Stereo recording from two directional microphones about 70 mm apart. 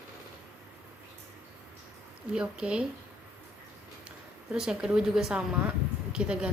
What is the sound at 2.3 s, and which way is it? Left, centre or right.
Speech, centre.